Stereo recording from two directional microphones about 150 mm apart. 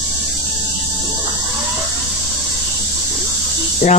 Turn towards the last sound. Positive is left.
turn(degrees=50)  # may be behind; listen again after turning